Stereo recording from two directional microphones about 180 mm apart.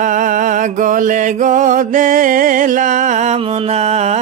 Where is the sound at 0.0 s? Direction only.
45° right (ahead or behind).